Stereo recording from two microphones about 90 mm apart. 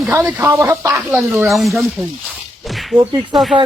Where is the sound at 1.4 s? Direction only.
Centre (ahead or behind).